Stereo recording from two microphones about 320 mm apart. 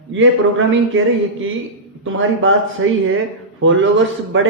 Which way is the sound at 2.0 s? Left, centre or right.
Right.